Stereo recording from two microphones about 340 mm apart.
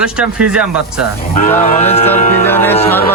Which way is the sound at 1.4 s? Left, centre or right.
Left.